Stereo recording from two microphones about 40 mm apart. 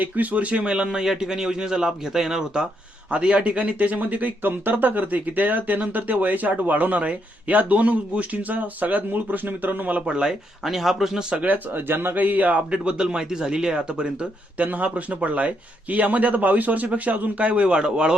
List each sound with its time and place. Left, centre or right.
0.0 s speech: right; by 2.6 s centre
3.1 s speech: right
10.1 s speech: right
10.6 s speech: centre
11.1 s speech: centre
11.3 s speech: right
12.1 s speech: right
12.7 s speech: right
14.6 s speech: right